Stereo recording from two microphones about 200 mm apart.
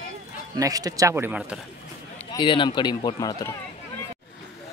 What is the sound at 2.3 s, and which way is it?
Speech, 25° left (ahead or behind).